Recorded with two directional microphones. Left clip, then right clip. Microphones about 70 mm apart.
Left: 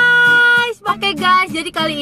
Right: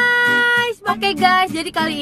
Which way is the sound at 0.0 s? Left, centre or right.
Centre.